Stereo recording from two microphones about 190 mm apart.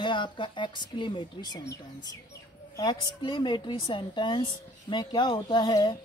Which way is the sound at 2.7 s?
25° left (ahead or behind).